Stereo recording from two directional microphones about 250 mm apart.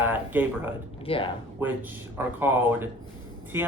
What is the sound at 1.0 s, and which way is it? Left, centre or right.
Speech, left.